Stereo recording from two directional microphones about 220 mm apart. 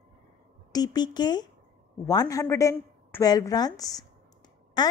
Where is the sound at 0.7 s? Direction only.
15° left (ahead or behind).